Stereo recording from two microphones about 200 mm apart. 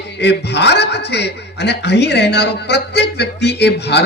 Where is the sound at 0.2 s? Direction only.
60° left (ahead or behind).